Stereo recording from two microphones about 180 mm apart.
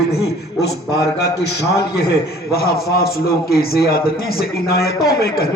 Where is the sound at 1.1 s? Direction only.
65° left (ahead or behind).